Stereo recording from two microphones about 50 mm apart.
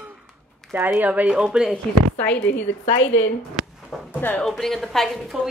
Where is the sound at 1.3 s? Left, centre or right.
Centre.